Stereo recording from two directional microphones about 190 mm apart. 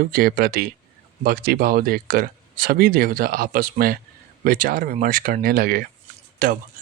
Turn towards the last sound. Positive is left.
turn(degrees=-45)  # may be behind; listen again after turning